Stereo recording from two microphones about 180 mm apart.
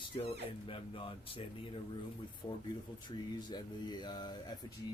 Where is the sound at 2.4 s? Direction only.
25° left (ahead or behind).